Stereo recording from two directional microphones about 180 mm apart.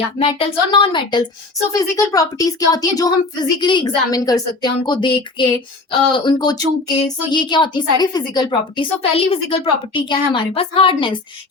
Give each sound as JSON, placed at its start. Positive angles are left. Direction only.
{"t": 0.2, "sound": "a woman's voice", "side_deg": 30}